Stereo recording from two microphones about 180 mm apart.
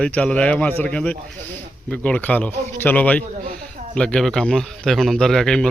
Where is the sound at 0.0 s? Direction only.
5° left (ahead or behind).